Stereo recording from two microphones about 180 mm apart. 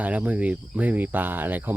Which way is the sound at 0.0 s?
10° right (ahead or behind).